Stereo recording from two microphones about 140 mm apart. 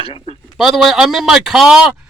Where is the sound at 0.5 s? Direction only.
Centre (ahead or behind).